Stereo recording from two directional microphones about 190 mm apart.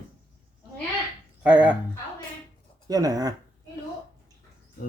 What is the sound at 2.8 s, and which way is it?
Speech, 20° right (ahead or behind).